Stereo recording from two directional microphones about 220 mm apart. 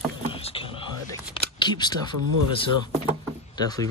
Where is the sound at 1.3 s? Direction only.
20° left (ahead or behind).